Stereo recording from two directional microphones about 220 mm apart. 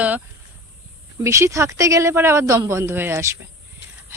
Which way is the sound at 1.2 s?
15° right (ahead or behind).